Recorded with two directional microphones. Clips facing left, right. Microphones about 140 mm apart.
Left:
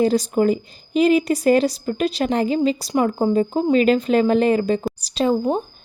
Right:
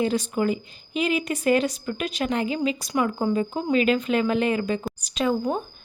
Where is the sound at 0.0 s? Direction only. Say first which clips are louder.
Left 6 dB; 40° left (ahead or behind).